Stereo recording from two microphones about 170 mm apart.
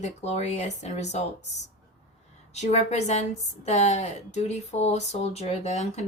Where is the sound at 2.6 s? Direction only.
40° left (ahead or behind).